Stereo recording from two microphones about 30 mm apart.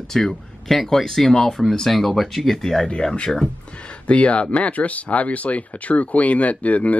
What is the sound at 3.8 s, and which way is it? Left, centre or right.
Speech, left.